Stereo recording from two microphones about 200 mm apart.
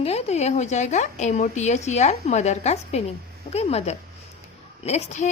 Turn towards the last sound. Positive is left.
turn(degrees=35)  # may be behind; listen again after turning